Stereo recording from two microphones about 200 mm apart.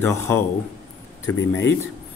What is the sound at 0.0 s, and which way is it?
Speech, 10° left (ahead or behind).